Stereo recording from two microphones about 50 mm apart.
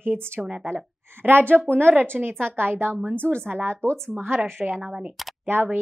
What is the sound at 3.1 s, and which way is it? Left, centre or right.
Speech, left.